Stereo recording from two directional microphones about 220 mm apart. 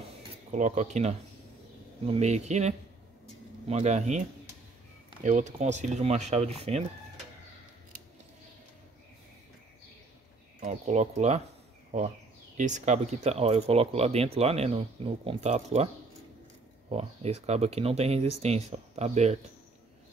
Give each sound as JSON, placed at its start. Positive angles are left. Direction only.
{"t": 0.5, "sound": "speech", "side_deg": -35}
{"t": 5.2, "sound": "speech", "side_deg": -35}
{"t": 10.6, "sound": "speech", "side_deg": -30}
{"t": 12.5, "sound": "speech", "side_deg": -35}
{"t": 16.9, "sound": "speech", "side_deg": -30}